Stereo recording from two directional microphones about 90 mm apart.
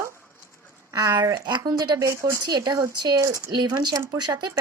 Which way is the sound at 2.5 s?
50° right (ahead or behind).